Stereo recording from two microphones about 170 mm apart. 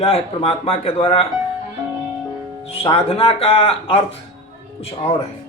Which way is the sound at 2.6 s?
35° left (ahead or behind).